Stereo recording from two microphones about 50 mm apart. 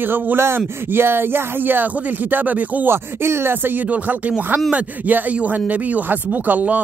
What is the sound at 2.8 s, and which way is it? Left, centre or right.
Speech, right.